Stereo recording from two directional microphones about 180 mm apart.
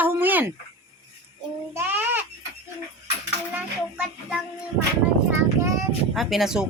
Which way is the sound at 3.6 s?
5° right (ahead or behind).